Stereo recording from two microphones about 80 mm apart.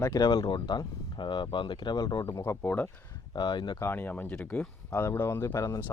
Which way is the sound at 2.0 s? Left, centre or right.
Left.